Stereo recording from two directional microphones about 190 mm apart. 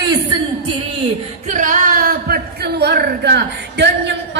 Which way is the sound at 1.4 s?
40° right (ahead or behind).